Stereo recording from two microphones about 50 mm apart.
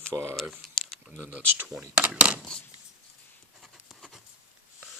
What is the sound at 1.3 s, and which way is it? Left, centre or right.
Speech, right.